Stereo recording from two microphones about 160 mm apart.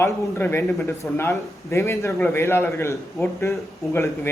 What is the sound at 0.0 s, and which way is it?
A man's voice, 15° left (ahead or behind).